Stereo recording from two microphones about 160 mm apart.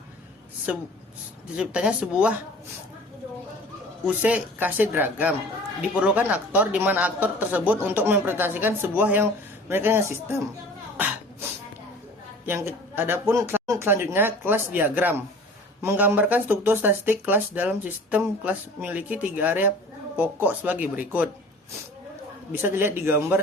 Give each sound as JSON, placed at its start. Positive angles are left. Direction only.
{"t": 0.7, "sound": "a man's voice", "side_deg": -5}
{"t": 4.0, "sound": "a man's voice", "side_deg": -10}
{"t": 10.9, "sound": "beatboxing", "side_deg": -10}
{"t": 12.5, "sound": "a man's voice", "side_deg": -15}
{"t": 22.6, "sound": "a man's voice", "side_deg": -15}